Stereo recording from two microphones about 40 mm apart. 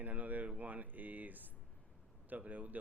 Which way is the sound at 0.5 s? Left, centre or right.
Right.